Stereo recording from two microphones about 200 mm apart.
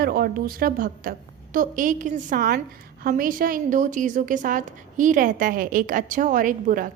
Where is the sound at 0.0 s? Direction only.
50° right (ahead or behind).